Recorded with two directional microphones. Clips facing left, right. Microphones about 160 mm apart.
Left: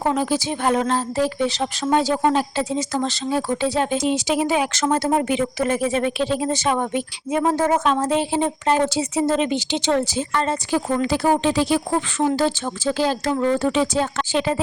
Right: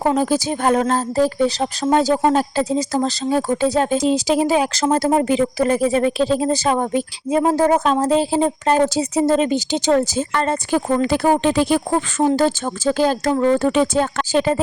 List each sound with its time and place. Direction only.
0.2 s speech: 40° right (ahead or behind)